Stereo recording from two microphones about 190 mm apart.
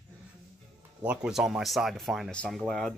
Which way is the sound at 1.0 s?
5° right (ahead or behind).